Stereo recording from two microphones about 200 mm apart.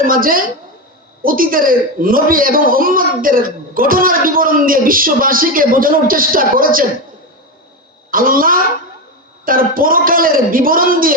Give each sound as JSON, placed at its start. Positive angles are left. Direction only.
{"t": 0.0, "sound": "a man's voice", "side_deg": -45}
{"t": 8.1, "sound": "a man's voice", "side_deg": -45}